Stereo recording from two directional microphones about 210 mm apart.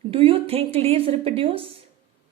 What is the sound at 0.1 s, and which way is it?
Speech, 25° right (ahead or behind).